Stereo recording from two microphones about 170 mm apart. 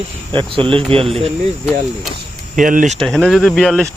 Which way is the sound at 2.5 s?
50° right (ahead or behind).